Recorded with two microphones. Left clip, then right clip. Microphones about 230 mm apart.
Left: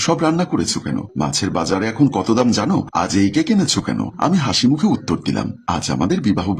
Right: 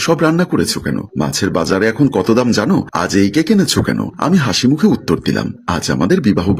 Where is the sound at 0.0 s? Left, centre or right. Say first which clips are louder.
Right 4 dB; centre.